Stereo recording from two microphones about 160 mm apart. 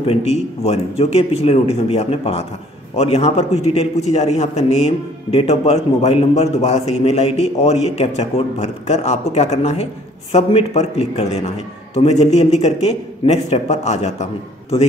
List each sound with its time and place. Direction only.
0.0 s a man's voice: 40° left (ahead or behind)